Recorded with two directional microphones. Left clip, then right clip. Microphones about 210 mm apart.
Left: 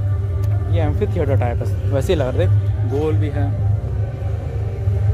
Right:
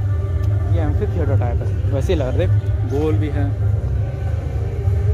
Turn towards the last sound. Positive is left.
turn(degrees=10)  # may be behind; listen again after turning